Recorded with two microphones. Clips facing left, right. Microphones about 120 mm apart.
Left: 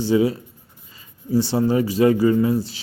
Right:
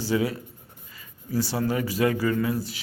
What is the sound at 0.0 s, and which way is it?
Speech, 25° left (ahead or behind).